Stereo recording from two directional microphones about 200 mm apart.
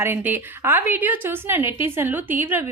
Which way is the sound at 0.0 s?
10° right (ahead or behind).